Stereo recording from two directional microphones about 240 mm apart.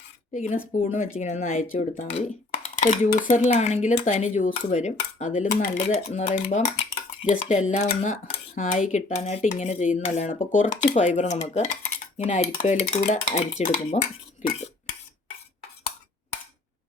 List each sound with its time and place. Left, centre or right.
0.3 s cutlery: left